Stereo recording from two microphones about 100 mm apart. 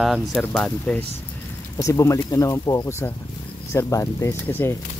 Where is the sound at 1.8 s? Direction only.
30° left (ahead or behind).